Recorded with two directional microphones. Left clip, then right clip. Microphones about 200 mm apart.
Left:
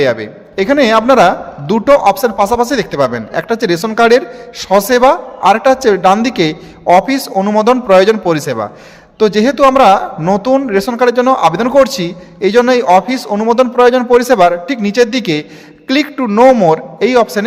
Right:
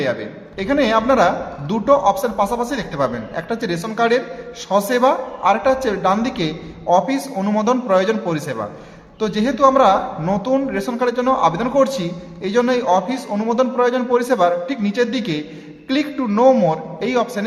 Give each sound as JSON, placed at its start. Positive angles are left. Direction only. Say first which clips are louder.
{"t": 0.0, "sound": "speech", "louder": "left 9 dB", "side_deg": 50}